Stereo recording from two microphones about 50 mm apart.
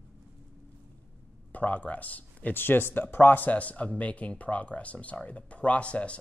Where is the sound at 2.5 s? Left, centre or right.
Left.